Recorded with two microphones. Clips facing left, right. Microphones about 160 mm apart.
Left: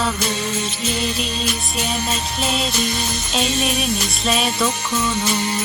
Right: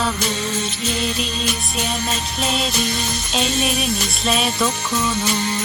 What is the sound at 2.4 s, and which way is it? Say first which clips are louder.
Music: right 1 dB; centre (ahead or behind).